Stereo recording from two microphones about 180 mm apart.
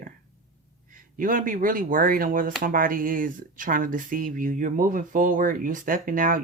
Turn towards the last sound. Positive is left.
turn(degrees=-50)  # may be behind; listen again after turning